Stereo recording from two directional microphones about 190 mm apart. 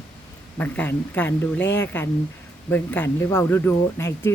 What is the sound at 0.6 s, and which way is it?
Speech, 10° left (ahead or behind).